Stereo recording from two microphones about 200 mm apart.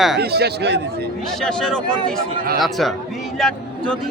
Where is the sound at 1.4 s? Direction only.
5° left (ahead or behind).